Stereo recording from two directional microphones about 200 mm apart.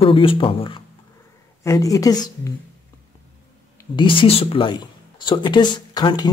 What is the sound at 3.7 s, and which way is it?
Speech, 25° left (ahead or behind).